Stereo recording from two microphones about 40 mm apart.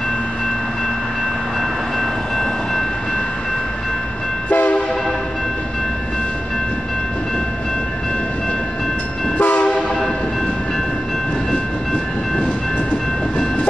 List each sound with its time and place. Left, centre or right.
2.0 s train: centre
4.5 s train: left
9.4 s train: left